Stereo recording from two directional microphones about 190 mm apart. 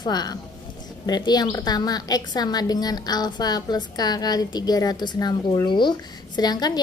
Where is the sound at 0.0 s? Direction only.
20° left (ahead or behind).